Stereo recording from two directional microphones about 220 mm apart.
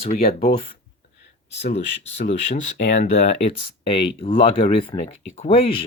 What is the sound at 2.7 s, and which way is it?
Speech, 50° left (ahead or behind).